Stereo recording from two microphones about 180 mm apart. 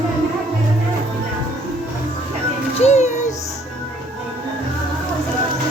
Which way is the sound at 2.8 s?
40° left (ahead or behind).